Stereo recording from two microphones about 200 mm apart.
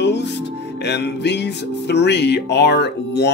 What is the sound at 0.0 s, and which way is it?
Speech, 60° left (ahead or behind).